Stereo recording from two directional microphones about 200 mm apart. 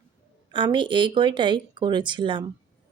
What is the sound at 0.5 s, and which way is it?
Speech, 25° right (ahead or behind).